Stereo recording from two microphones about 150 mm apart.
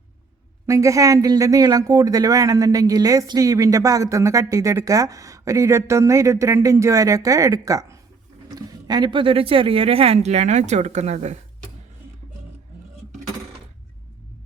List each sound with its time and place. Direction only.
0.7 s speech: 20° right (ahead or behind); by 11.3 s 50° right (ahead or behind)